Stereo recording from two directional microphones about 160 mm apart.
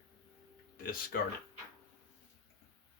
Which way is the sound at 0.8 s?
65° left (ahead or behind).